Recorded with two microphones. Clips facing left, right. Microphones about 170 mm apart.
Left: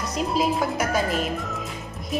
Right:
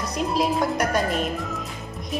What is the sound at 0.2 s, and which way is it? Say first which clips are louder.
A woman's voice: right 1 dB; centre (ahead or behind).